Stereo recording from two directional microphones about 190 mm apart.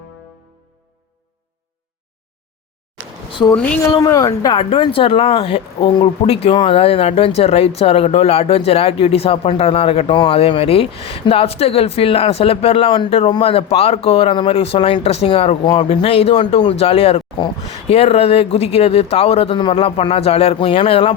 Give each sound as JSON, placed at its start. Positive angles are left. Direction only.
{"t": 3.9, "sound": "a woman's voice", "side_deg": 15}